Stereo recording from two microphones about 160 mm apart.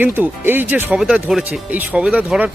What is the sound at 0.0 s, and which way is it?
Speech, 10° right (ahead or behind).